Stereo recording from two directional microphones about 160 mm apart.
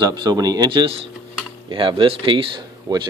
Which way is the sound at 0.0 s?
25° right (ahead or behind).